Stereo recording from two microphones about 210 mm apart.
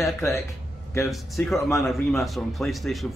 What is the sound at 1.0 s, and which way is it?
Speech, centre (ahead or behind).